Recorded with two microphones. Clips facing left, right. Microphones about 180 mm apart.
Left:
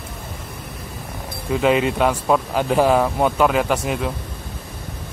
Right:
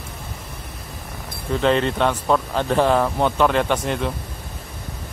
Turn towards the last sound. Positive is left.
turn(degrees=5)  # may be behind; listen again after turning